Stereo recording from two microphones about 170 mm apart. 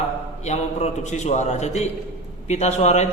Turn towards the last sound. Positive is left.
turn(degrees=40)  # may be behind; listen again after turning